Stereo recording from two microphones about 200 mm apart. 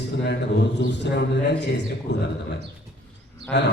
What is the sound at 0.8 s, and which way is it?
Speech, 60° left (ahead or behind).